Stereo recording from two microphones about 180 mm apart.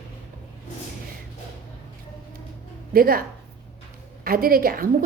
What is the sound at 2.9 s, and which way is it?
A woman's voice, 55° right (ahead or behind).